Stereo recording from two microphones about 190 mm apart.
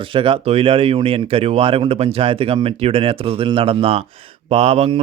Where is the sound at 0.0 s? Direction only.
25° right (ahead or behind).